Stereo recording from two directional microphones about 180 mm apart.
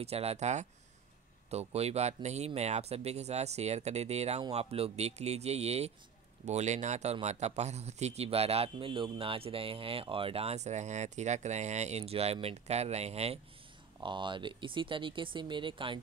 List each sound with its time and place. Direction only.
0.0 s a man's voice: 35° right (ahead or behind)